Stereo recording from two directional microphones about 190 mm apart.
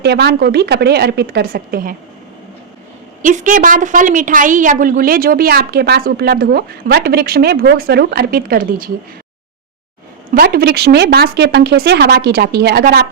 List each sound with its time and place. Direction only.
0.0 s a woman's voice: 60° right (ahead or behind)
3.2 s a woman's voice: 40° right (ahead or behind)
10.3 s a woman's voice: 55° right (ahead or behind)